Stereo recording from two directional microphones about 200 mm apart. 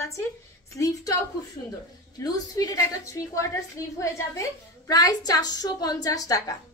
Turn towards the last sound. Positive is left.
turn(degrees=15)  # may be behind; listen again after turning